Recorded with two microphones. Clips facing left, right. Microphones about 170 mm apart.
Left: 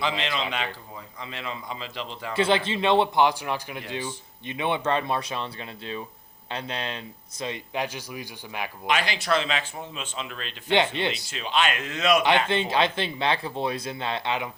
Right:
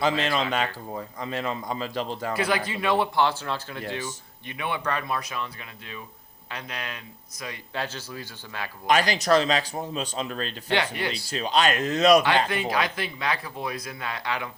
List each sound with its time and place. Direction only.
0.0 s speech: 45° right (ahead or behind)
2.3 s speech: 25° left (ahead or behind)
8.9 s speech: 40° right (ahead or behind)
10.7 s speech: 20° left (ahead or behind)
11.3 s speech: 40° right (ahead or behind)
12.5 s speech: 25° left (ahead or behind)